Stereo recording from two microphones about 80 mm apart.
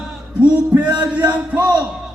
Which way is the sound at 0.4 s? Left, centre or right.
Centre.